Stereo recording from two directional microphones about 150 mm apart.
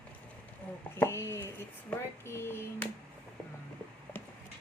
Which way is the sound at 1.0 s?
15° left (ahead or behind).